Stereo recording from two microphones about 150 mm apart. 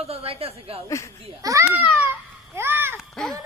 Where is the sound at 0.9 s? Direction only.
20° left (ahead or behind).